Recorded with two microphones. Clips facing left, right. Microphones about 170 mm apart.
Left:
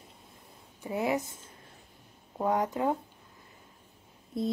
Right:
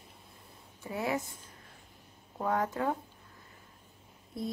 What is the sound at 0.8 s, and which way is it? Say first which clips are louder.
Speech: left 4 dB; 20° left (ahead or behind).